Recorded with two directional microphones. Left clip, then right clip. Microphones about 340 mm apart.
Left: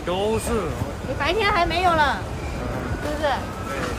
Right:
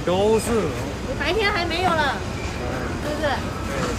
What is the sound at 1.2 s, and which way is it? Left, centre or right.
Speech, centre.